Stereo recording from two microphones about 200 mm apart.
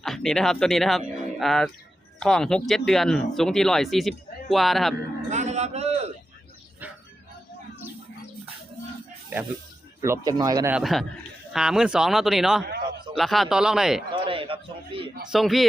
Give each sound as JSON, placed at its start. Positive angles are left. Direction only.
{"t": 0.0, "sound": "speech", "side_deg": 0}
{"t": 5.3, "sound": "a sound", "side_deg": -35}
{"t": 10.0, "sound": "speech", "side_deg": -15}
{"t": 10.8, "sound": "speech", "side_deg": 0}
{"t": 14.3, "sound": "a sound", "side_deg": -25}
{"t": 15.3, "sound": "speech", "side_deg": 0}